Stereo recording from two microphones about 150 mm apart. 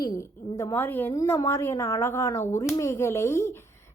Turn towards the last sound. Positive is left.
turn(degrees=15)  # may be behind; listen again after turning